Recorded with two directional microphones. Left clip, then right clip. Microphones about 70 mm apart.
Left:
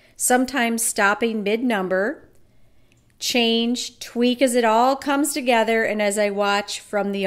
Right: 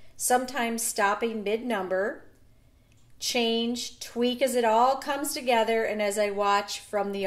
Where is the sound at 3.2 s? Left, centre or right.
Left.